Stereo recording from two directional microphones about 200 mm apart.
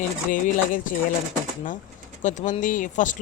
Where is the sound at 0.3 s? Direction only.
40° left (ahead or behind).